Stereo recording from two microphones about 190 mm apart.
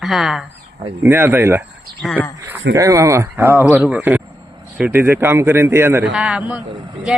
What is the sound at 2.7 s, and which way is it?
A woman's voice, 15° right (ahead or behind).